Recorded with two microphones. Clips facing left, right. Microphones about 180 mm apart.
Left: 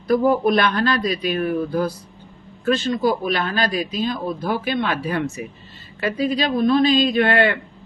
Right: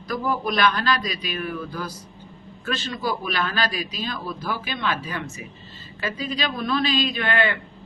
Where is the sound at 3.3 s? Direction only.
25° left (ahead or behind).